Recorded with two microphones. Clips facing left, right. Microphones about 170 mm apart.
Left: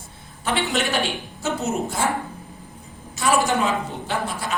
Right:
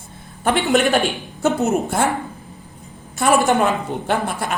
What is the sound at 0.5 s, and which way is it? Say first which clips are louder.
A woman's voice: right 7 dB; 55° right (ahead or behind).